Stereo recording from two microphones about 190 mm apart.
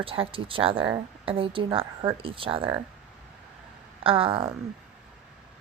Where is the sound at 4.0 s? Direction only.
30° right (ahead or behind).